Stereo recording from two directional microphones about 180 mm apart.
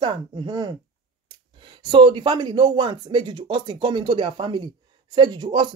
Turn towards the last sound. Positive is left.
turn(degrees=-25)  # may be behind; listen again after turning